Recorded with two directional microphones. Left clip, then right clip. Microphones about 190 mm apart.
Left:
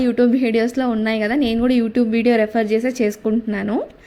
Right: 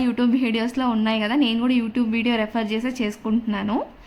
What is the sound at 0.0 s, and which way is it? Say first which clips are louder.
A woman's voice: left 5 dB; 15° left (ahead or behind).